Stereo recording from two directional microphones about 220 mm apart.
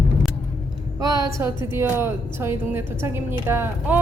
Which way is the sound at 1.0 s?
15° right (ahead or behind).